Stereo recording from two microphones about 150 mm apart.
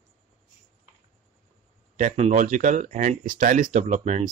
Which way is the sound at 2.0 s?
50° right (ahead or behind).